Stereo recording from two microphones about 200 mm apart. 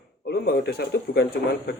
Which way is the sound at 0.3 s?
55° left (ahead or behind).